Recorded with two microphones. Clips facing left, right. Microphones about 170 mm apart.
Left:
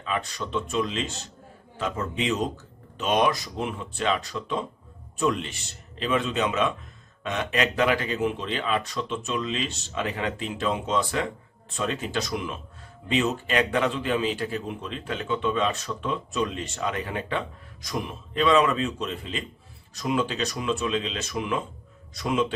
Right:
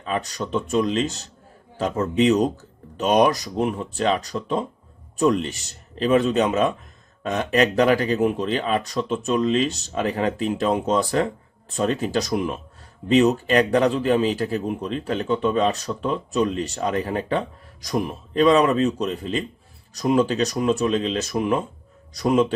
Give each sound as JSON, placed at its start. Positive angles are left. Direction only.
{"t": 0.0, "sound": "a man's voice", "side_deg": -40}